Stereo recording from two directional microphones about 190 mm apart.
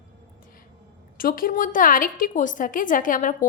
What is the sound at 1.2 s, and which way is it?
A woman's voice, 50° left (ahead or behind).